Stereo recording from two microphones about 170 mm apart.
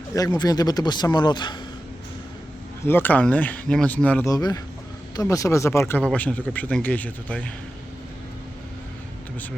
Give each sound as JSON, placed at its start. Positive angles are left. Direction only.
{"t": 0.1, "sound": "a man's voice", "side_deg": 20}
{"t": 2.8, "sound": "speech", "side_deg": 10}
{"t": 4.3, "sound": "a man's voice", "side_deg": 20}